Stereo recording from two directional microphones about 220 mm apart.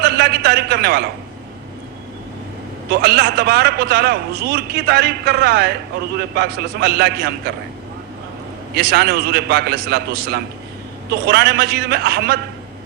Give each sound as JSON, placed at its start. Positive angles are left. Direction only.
{"t": 0.0, "sound": "a man's voice", "side_deg": -45}
{"t": 2.9, "sound": "a man's voice", "side_deg": -45}
{"t": 8.7, "sound": "a man's voice", "side_deg": -45}